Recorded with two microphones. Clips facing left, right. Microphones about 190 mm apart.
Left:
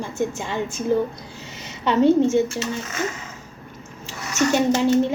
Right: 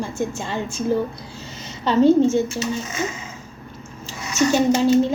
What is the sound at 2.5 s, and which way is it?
Speech, 15° right (ahead or behind).